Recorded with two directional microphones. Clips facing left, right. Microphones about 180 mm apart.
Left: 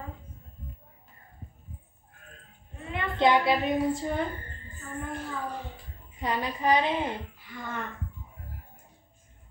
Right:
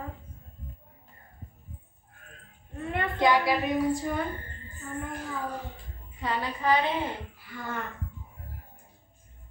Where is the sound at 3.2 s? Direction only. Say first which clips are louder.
Left 2 dB; 25° left (ahead or behind).